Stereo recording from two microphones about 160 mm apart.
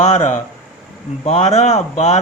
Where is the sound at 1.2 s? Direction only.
40° left (ahead or behind).